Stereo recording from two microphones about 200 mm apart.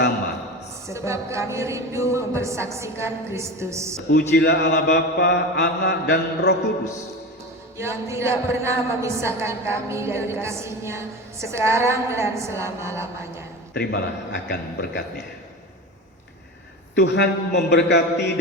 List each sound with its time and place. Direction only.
0.9 s speech: 15° right (ahead or behind)
4.1 s mantra: 55° left (ahead or behind)
7.8 s speech: 15° right (ahead or behind)
14.4 s mantra: 55° left (ahead or behind)
16.9 s mantra: 60° left (ahead or behind)